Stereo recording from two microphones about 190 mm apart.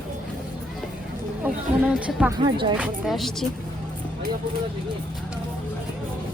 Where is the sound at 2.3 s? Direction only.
25° right (ahead or behind).